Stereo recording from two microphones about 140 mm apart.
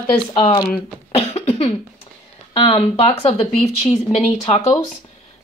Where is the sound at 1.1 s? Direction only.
45° left (ahead or behind).